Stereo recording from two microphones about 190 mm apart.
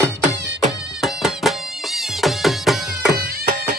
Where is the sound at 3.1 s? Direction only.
55° right (ahead or behind).